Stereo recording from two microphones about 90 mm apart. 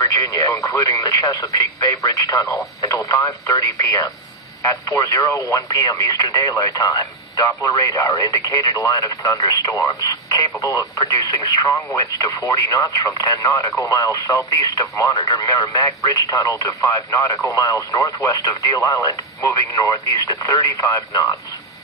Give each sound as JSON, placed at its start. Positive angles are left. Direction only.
{"t": 0.0, "sound": "speech", "side_deg": 40}
{"t": 15.1, "sound": "speech", "side_deg": 55}